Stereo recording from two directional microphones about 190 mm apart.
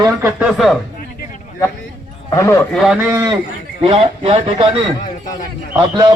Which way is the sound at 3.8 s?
30° right (ahead or behind).